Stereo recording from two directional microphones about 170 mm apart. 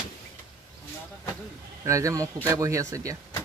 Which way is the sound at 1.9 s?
20° right (ahead or behind).